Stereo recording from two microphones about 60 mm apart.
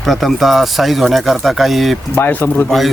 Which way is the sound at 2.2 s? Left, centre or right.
Left.